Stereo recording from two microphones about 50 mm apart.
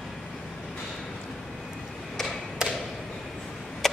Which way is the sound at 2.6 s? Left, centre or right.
Centre.